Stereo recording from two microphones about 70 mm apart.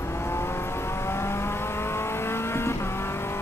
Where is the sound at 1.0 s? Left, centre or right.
Left.